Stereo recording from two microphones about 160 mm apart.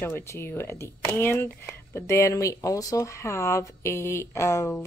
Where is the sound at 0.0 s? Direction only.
15° left (ahead or behind).